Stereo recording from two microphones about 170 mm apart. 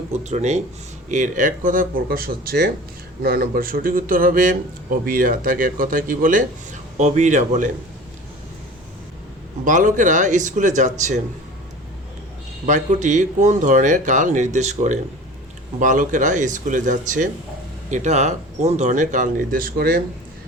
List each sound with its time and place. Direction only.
0.1 s speech: 40° right (ahead or behind)
9.6 s speech: 50° right (ahead or behind)
12.6 s speech: 45° right (ahead or behind)